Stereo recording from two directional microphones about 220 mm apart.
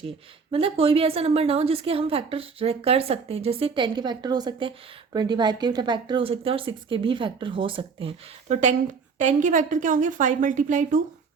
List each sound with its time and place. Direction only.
0.5 s speech: 25° right (ahead or behind)